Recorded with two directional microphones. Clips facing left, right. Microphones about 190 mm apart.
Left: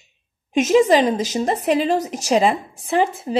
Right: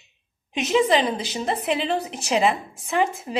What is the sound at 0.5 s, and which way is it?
A woman's voice, 45° left (ahead or behind).